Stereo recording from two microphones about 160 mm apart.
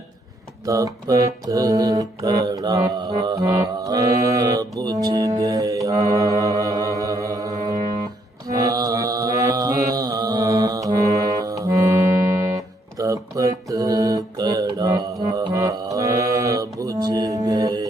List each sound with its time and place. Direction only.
0.6 s mantra: 20° right (ahead or behind)
11.3 s music: 25° right (ahead or behind)
15.2 s mantra: 25° right (ahead or behind)